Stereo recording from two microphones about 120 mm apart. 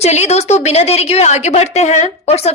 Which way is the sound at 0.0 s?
65° left (ahead or behind).